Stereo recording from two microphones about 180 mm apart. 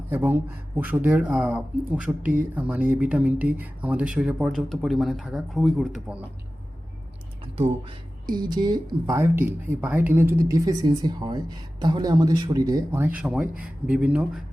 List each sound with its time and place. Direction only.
0.1 s speech: 10° right (ahead or behind)
7.5 s speech: 30° right (ahead or behind); by 14.3 s 5° right (ahead or behind)